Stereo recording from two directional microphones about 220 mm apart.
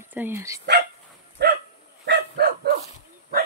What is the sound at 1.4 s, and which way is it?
Dog, 50° right (ahead or behind).